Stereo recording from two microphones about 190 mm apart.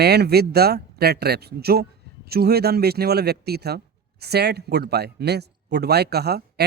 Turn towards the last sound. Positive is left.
turn(degrees=-55)  # may be behind; listen again after turning